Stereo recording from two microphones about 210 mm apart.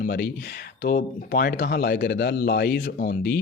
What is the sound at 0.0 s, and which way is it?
Speech, 50° left (ahead or behind).